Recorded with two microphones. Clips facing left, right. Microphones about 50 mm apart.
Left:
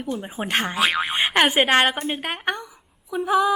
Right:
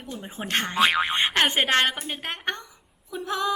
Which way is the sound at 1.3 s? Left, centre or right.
Centre.